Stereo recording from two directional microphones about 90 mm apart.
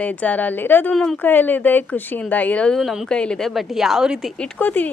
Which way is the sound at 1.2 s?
20° left (ahead or behind).